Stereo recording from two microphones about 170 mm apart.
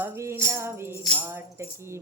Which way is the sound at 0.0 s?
15° right (ahead or behind).